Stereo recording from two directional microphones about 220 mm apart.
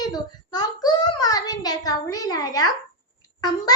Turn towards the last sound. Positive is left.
turn(degrees=15)  # may be behind; listen again after turning